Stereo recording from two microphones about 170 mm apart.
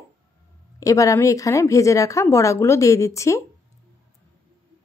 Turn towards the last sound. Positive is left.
turn(degrees=20)  # may be behind; listen again after turning